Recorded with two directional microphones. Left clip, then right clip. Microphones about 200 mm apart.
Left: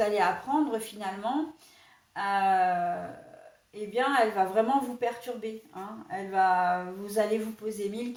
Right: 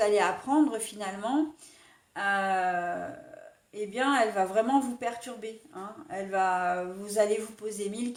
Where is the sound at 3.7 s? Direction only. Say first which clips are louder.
Left 1 dB; 45° right (ahead or behind).